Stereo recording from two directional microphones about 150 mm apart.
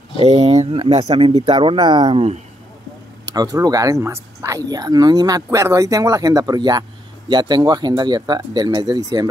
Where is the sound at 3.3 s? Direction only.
25° right (ahead or behind).